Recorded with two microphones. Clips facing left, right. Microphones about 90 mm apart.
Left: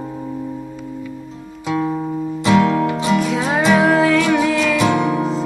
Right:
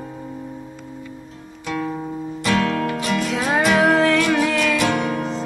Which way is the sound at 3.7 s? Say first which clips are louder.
Left 3 dB; centre (ahead or behind).